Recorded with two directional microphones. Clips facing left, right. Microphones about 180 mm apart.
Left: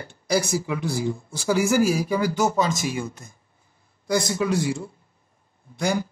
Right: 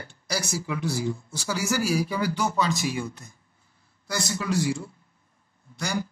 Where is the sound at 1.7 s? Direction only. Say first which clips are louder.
Left 1 dB; 50° left (ahead or behind).